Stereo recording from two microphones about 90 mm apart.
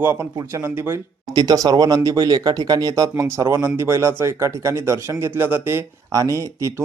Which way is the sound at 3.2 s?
30° right (ahead or behind).